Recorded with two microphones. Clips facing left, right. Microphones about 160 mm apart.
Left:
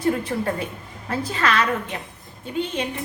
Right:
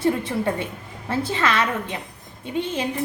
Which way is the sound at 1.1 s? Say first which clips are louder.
Right 1 dB; 25° right (ahead or behind).